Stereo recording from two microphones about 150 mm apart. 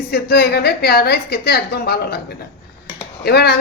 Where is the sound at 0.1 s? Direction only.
90° left.